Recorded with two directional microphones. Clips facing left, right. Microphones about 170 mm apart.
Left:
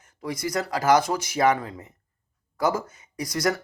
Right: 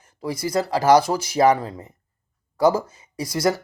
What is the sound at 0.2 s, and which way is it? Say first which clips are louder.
Speech: right 4 dB; 30° right (ahead or behind).